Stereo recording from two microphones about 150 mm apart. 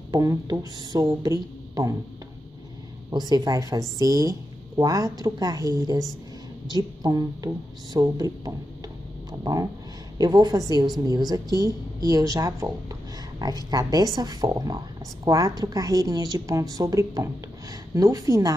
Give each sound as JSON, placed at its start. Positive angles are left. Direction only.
{"t": 0.1, "sound": "a woman's voice", "side_deg": -25}
{"t": 3.1, "sound": "a woman's voice", "side_deg": -30}